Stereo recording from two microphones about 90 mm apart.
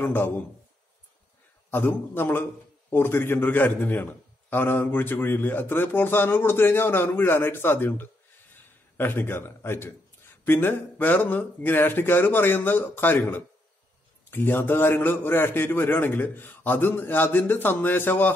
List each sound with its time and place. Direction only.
0.0 s a man's voice: 25° left (ahead or behind)
1.7 s a man's voice: 25° left (ahead or behind)